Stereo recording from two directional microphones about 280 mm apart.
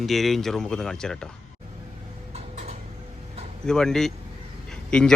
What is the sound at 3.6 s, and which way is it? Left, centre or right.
Speech, centre.